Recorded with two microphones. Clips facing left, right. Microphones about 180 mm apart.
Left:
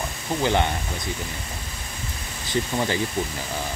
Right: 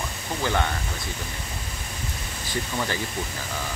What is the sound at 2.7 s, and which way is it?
Speech, 20° left (ahead or behind).